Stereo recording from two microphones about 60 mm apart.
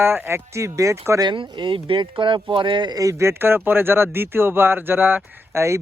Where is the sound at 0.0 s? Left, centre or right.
Right.